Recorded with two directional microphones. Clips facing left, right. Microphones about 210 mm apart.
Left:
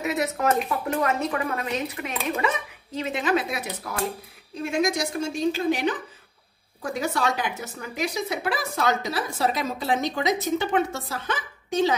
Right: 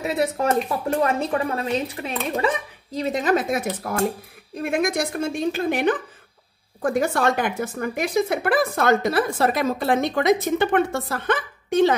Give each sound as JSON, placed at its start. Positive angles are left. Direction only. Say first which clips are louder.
{"t": 0.0, "sound": "speech", "louder": "right 2 dB", "side_deg": -30}